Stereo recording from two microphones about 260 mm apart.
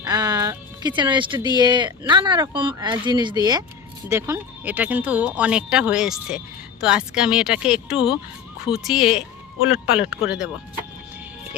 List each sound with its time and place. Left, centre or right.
0.0 s speech: centre